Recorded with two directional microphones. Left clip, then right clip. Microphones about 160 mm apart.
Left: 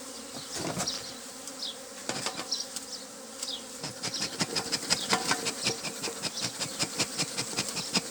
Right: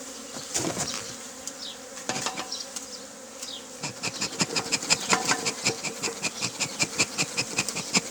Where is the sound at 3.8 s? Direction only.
25° right (ahead or behind).